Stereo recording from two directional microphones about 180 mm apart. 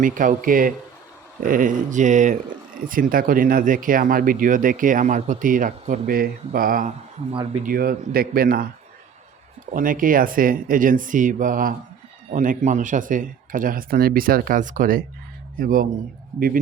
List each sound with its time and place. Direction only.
0.0 s speech: 45° right (ahead or behind)
9.7 s speech: 50° right (ahead or behind)